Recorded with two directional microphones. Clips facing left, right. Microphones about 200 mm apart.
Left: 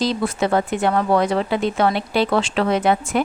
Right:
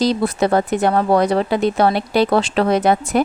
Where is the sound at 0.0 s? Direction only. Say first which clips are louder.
Right 4 dB; 40° right (ahead or behind).